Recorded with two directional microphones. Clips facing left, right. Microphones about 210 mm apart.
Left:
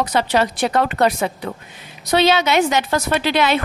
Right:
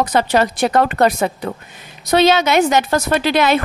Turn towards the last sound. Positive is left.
turn(degrees=-45)  # may be behind; listen again after turning